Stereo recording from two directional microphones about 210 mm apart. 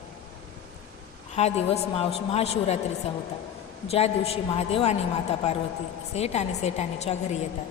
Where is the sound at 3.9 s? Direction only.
30° left (ahead or behind).